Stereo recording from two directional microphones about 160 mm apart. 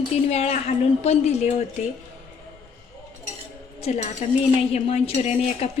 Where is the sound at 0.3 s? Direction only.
40° left (ahead or behind).